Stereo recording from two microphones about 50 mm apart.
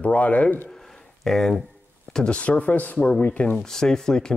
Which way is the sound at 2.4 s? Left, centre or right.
Left.